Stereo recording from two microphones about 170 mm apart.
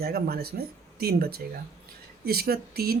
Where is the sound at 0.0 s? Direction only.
65° right (ahead or behind).